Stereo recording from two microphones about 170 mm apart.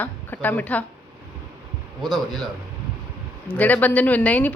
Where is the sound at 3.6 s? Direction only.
10° left (ahead or behind).